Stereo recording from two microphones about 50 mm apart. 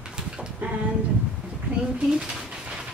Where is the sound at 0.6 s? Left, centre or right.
Right.